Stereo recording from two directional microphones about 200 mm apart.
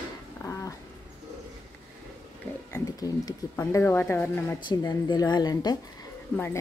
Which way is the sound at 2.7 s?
15° left (ahead or behind).